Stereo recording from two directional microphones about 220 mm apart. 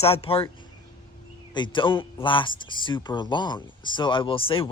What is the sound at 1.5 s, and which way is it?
Speech, 20° left (ahead or behind).